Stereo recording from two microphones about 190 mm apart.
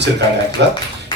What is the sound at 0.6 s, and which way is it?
Speech, 65° right (ahead or behind).